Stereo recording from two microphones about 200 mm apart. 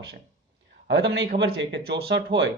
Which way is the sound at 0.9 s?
65° right (ahead or behind).